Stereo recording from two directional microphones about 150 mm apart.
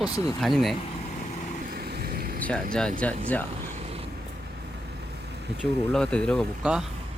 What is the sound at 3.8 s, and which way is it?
Vehicle, 40° right (ahead or behind).